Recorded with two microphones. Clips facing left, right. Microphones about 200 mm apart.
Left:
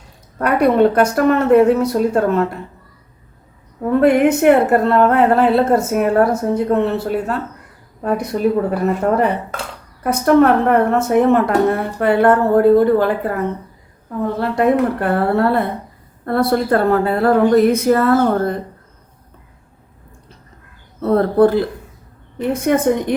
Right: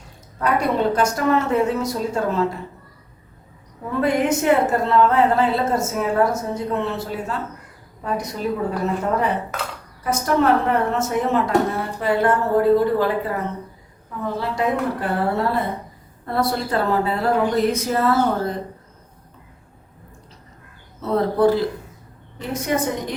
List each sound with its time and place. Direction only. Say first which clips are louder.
0.3 s a woman's voice: left 7 dB; 60° left (ahead or behind)
4.0 s a woman's voice: left 7 dB; 60° left (ahead or behind)
10.0 s a woman's voice: left 7 dB; 60° left (ahead or behind)
21.0 s a woman's voice: left 5 dB; 55° left (ahead or behind)